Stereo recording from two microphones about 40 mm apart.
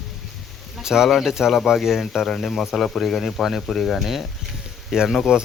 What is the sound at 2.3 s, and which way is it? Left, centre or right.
Speech, centre.